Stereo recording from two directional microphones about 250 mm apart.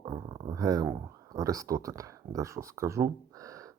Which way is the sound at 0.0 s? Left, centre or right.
Centre.